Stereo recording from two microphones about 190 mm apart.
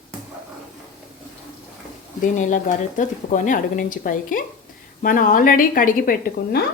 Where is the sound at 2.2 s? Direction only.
40° left (ahead or behind).